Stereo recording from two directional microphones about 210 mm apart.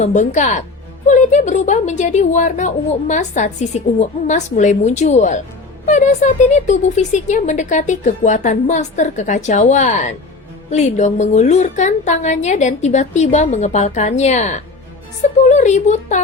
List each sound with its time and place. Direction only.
0.0 s a woman's voice: 35° left (ahead or behind)